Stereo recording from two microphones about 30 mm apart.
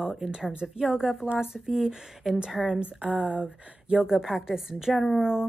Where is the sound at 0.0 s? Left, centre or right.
Right.